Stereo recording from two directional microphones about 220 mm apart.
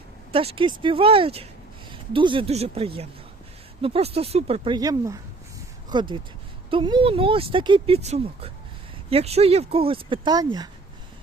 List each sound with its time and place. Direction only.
0.3 s speech: 25° right (ahead or behind)